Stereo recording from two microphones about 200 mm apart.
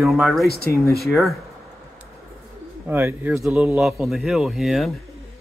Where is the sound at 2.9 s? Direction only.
10° right (ahead or behind).